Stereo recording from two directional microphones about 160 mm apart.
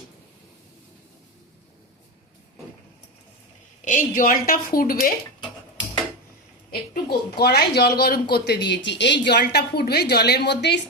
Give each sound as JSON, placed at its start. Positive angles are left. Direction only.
{"t": 3.8, "sound": "speech", "side_deg": 55}
{"t": 6.9, "sound": "speech", "side_deg": 80}